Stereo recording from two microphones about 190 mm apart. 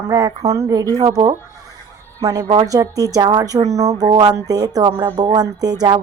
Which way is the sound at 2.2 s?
20° right (ahead or behind).